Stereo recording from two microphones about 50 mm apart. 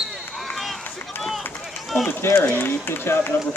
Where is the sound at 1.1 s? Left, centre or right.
Left.